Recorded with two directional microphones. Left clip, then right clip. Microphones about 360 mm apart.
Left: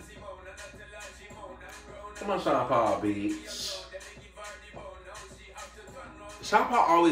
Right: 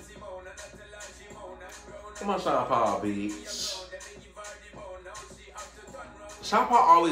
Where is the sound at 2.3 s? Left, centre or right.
Centre.